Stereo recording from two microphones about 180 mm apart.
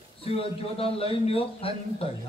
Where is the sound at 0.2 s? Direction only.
30° left (ahead or behind).